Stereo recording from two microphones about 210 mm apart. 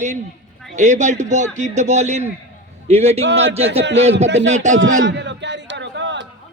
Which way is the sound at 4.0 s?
30° right (ahead or behind).